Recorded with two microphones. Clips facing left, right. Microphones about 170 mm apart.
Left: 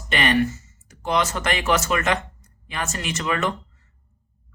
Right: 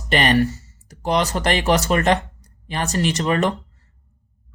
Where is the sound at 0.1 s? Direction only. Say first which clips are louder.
Right 3 dB; 35° right (ahead or behind).